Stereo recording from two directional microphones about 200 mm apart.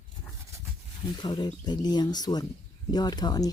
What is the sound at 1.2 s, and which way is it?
Speech, 20° left (ahead or behind).